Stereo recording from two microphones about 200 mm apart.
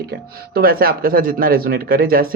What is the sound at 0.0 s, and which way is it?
Speech, 50° right (ahead or behind).